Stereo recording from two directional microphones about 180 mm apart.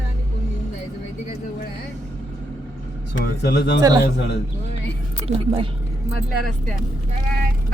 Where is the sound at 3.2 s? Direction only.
65° left (ahead or behind).